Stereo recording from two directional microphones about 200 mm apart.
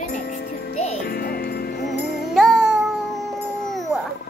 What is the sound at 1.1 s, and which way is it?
Music, 50° left (ahead or behind).